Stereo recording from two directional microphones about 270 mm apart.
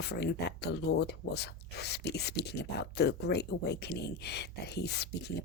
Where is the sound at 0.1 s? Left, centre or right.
Left.